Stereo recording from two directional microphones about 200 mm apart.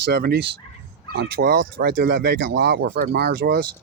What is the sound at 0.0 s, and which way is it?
Speech, 55° right (ahead or behind).